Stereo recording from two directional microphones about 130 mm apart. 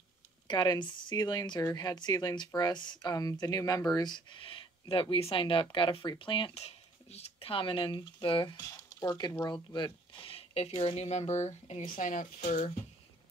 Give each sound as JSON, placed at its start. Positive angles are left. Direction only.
{"t": 0.5, "sound": "speech", "side_deg": 35}
{"t": 10.2, "sound": "speech", "side_deg": 50}
{"t": 12.0, "sound": "speech", "side_deg": 90}
{"t": 12.4, "sound": "speech", "side_deg": 70}